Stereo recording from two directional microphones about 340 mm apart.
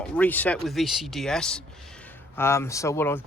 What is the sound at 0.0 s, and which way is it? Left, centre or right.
Speech, centre.